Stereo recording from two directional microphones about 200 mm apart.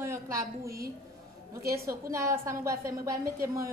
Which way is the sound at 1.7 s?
15° right (ahead or behind).